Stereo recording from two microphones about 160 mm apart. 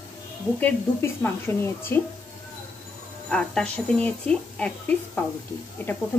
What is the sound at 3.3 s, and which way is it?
Speech, 5° left (ahead or behind).